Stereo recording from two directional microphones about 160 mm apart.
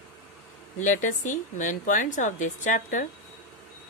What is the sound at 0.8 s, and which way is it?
A woman's voice, 50° left (ahead or behind).